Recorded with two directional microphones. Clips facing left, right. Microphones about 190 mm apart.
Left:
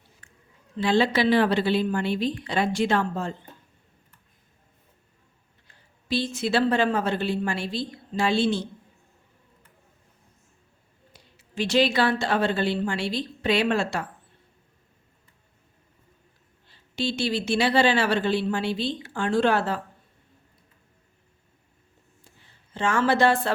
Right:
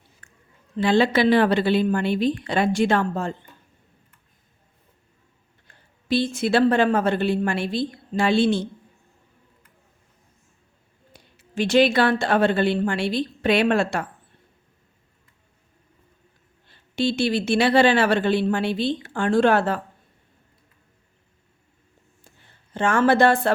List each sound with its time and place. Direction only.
0.2 s a sound: 45° right (ahead or behind)
0.8 s speech: 55° right (ahead or behind)
5.6 s speech: 55° right (ahead or behind)
11.1 s speech: 50° right (ahead or behind)
16.6 s speech: 55° right (ahead or behind)
22.7 s a woman's voice: 55° right (ahead or behind)